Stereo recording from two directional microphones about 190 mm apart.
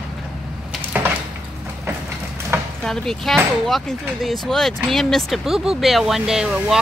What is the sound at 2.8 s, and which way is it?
Speech, centre (ahead or behind).